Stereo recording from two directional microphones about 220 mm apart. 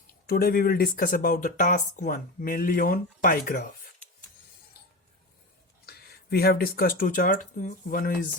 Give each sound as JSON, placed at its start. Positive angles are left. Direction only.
{"t": 0.1, "sound": "speech", "side_deg": 45}
{"t": 5.8, "sound": "speech", "side_deg": 45}